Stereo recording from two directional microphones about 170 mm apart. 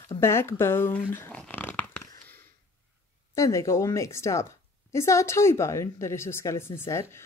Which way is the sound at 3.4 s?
15° left (ahead or behind).